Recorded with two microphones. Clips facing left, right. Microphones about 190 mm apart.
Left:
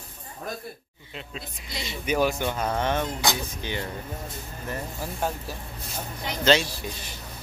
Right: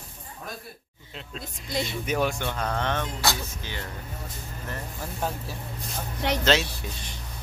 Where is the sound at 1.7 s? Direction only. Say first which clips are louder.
Right 7 dB; 55° right (ahead or behind).